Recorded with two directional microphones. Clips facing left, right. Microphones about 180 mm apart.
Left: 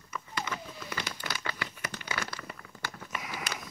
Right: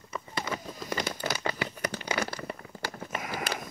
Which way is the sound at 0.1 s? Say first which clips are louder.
Right 3 dB; 35° right (ahead or behind).